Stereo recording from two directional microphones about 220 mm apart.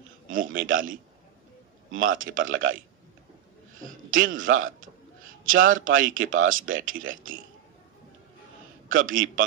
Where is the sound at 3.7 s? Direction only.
35° right (ahead or behind).